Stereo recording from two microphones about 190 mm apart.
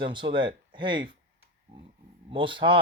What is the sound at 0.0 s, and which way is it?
Speech, 25° right (ahead or behind).